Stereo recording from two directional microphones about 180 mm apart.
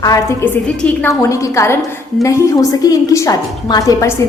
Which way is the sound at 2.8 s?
20° left (ahead or behind).